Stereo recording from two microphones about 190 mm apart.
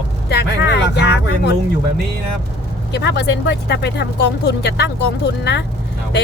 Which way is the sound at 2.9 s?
65° left (ahead or behind).